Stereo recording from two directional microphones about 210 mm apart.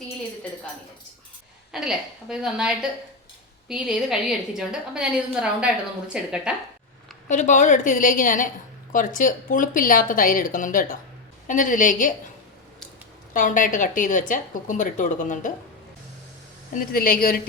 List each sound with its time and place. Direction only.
1.7 s a woman's voice: centre (ahead or behind)
7.3 s a woman's voice: 35° left (ahead or behind)
13.3 s a woman's voice: 40° left (ahead or behind)
16.7 s a woman's voice: 45° left (ahead or behind)